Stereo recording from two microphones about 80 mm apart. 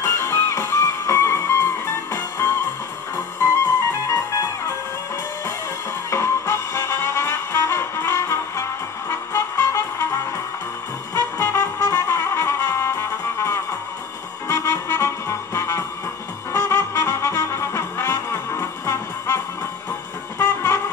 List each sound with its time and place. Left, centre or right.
0.0 s music: left
4.1 s music: left
6.0 s music: left
11.1 s trumpet: left
14.5 s music: left